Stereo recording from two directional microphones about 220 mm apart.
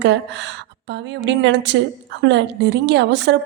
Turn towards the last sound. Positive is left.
turn(degrees=-50)  # may be behind; listen again after turning